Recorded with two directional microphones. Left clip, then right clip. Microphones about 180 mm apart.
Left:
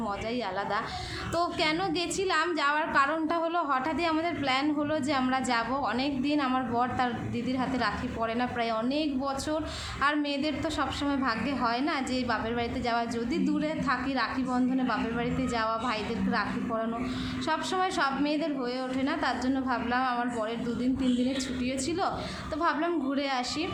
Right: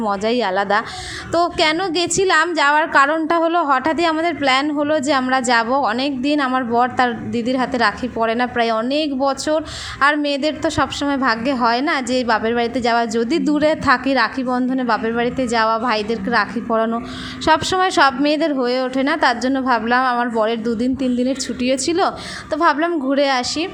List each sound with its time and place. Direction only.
0.0 s a woman's voice: 45° right (ahead or behind)